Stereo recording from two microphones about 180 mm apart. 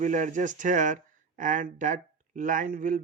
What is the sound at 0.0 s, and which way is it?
Speech, 45° right (ahead or behind).